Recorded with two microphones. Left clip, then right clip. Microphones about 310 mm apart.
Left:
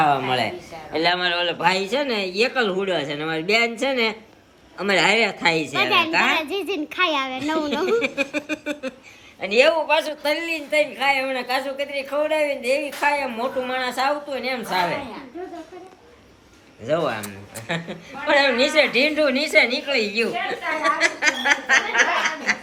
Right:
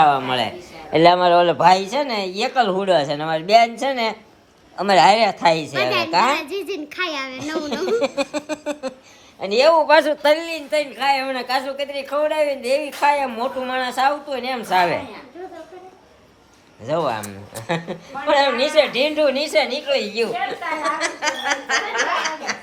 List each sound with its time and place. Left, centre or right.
0.0 s a woman's voice: centre
6.9 s a woman's voice: centre
9.8 s speech: right
10.4 s a woman's voice: centre
14.7 s speech: right
16.8 s a woman's voice: centre